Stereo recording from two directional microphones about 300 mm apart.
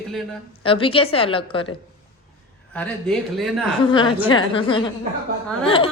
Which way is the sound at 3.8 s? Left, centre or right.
Centre.